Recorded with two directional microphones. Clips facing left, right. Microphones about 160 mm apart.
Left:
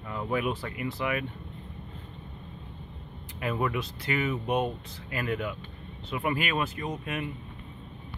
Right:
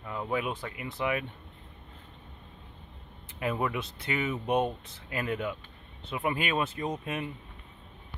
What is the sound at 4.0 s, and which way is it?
Speech, 20° right (ahead or behind).